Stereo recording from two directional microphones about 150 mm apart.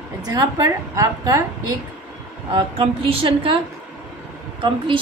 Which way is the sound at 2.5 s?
40° right (ahead or behind).